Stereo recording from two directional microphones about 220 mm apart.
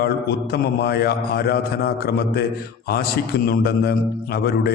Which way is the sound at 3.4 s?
45° left (ahead or behind).